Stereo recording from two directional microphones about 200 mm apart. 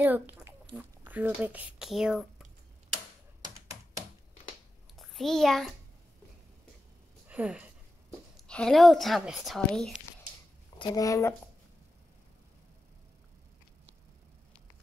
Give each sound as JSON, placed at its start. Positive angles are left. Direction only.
{"t": 0.0, "sound": "speech", "side_deg": -10}
{"t": 4.9, "sound": "a child's voice", "side_deg": 0}
{"t": 7.2, "sound": "speech", "side_deg": -5}
{"t": 8.4, "sound": "speech", "side_deg": 5}
{"t": 10.8, "sound": "speech", "side_deg": 20}